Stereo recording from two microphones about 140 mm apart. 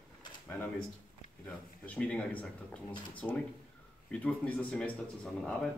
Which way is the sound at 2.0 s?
10° left (ahead or behind).